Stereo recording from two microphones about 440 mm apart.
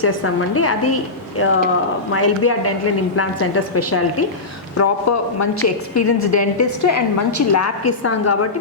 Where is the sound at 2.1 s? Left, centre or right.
Left.